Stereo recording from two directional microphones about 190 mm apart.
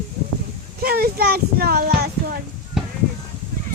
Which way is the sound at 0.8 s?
55° right (ahead or behind).